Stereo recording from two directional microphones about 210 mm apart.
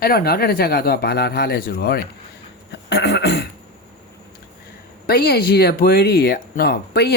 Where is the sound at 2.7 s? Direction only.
55° left (ahead or behind).